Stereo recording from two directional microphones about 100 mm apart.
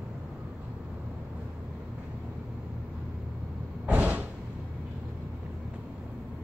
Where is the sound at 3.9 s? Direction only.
15° right (ahead or behind).